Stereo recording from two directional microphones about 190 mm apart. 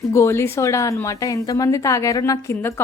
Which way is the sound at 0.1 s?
15° left (ahead or behind).